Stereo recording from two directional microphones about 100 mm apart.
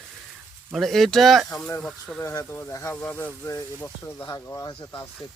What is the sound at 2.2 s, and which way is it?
Speech, 30° left (ahead or behind).